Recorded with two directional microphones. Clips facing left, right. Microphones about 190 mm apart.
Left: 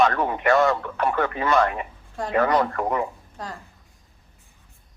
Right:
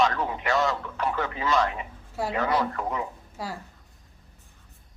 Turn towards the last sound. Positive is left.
turn(degrees=-10)  # may be behind; listen again after turning